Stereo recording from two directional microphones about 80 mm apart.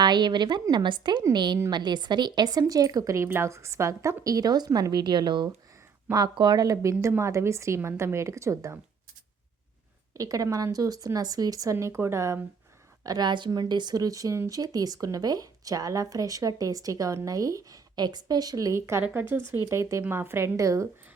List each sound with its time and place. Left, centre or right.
0.0 s a woman's voice: right
3.2 s a woman's voice: right
6.1 s speech: right
6.3 s a woman's voice: right
7.2 s a woman's voice: right
10.2 s speech: right
13.1 s a woman's voice: right
14.6 s speech: right
18.7 s a woman's voice: right